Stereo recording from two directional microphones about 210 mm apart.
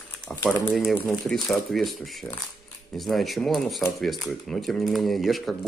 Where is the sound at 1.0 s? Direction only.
Centre (ahead or behind).